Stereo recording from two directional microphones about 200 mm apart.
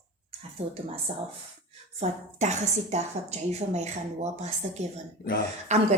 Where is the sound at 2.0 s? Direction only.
35° right (ahead or behind).